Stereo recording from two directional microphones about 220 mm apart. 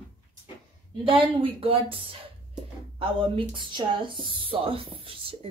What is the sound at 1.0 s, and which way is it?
Speech, 25° right (ahead or behind).